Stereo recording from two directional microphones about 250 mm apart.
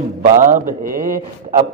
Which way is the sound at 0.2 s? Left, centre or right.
Right.